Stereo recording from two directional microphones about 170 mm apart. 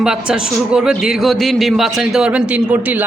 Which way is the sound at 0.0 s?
5° right (ahead or behind).